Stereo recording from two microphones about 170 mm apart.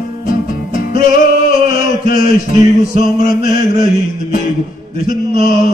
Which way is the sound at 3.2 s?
55° left (ahead or behind).